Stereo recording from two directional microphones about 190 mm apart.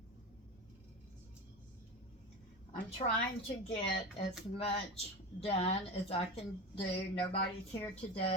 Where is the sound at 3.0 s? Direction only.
30° left (ahead or behind).